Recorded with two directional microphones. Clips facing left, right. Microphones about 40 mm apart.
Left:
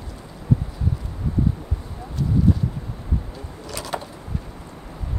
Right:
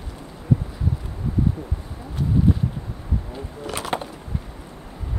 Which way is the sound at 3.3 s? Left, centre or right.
Right.